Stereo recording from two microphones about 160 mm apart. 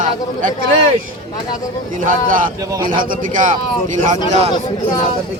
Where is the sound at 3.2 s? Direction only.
55° right (ahead or behind).